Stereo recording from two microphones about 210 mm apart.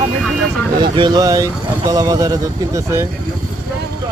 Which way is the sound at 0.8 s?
20° right (ahead or behind).